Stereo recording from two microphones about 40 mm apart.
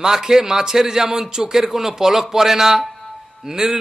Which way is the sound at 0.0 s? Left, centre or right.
Centre.